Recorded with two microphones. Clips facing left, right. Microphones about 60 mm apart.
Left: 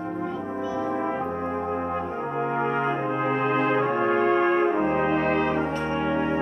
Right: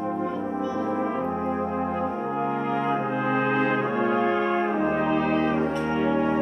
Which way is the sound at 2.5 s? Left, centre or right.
Left.